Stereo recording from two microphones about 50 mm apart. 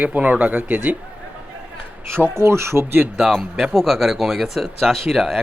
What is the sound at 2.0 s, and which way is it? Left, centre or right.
Speech, right.